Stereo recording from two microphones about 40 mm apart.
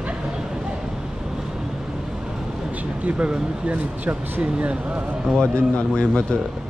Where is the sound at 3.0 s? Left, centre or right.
Right.